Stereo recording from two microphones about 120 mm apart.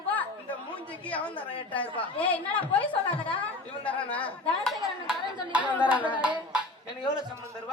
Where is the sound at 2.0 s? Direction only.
10° left (ahead or behind).